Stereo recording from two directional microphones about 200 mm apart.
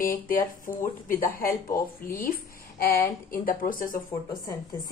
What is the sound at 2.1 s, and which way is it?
Speech, 45° left (ahead or behind).